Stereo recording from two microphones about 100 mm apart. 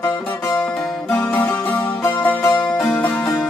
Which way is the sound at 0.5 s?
10° left (ahead or behind).